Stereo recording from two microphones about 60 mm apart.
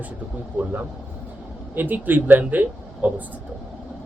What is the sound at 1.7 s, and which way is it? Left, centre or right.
Speech, right.